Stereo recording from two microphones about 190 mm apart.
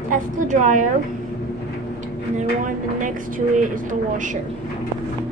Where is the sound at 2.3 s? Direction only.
45° right (ahead or behind).